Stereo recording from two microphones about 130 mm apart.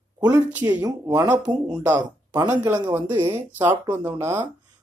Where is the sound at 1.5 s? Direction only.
30° right (ahead or behind).